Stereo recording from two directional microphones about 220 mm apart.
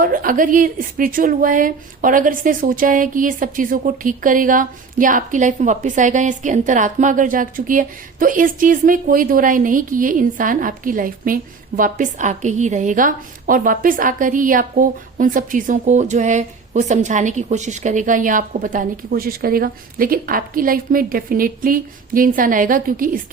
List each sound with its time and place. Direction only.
0.0 s a woman's voice: 40° right (ahead or behind)